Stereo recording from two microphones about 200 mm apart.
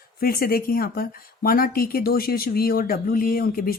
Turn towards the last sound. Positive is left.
turn(degrees=45)  # may be behind; listen again after turning